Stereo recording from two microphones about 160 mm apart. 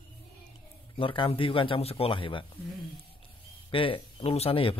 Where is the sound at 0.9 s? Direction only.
30° left (ahead or behind).